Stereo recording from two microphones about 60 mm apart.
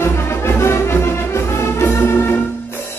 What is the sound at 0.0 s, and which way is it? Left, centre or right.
Music, left.